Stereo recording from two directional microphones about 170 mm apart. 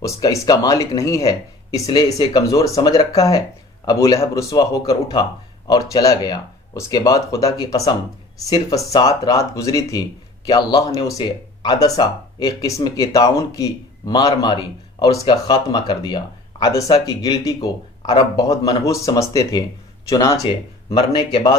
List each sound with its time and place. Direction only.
0.0 s speech: 20° left (ahead or behind)